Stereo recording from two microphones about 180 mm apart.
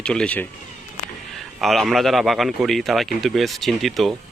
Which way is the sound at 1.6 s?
Centre (ahead or behind).